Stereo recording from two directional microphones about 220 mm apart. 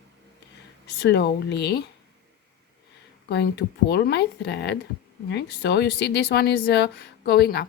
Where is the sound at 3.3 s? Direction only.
50° left (ahead or behind).